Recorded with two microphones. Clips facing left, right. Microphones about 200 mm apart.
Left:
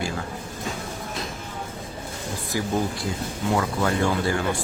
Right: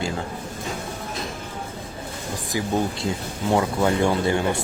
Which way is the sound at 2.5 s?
20° right (ahead or behind).